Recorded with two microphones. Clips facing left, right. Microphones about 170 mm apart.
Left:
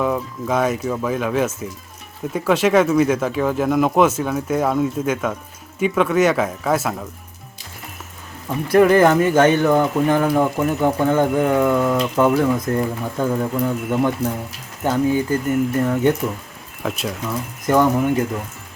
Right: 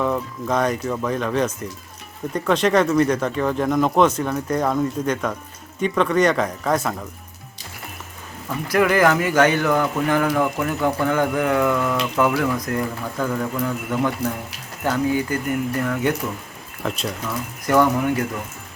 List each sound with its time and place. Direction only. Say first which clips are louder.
0.0 s speech: left 1 dB; 5° left (ahead or behind)
8.4 s speech: left 5 dB; 30° left (ahead or behind)
15.3 s speech: left 4 dB; 25° left (ahead or behind)
16.8 s speech: left 1 dB; 5° left (ahead or behind)
17.7 s speech: left 2 dB; 20° left (ahead or behind)